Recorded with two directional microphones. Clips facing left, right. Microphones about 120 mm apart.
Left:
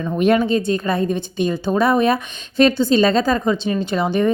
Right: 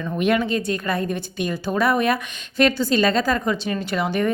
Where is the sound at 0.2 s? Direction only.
30° left (ahead or behind).